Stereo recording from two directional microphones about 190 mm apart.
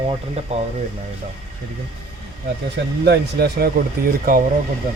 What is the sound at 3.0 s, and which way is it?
Speech, 60° right (ahead or behind).